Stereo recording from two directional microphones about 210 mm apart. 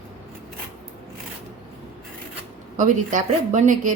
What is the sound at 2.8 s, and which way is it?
Speech, 35° right (ahead or behind).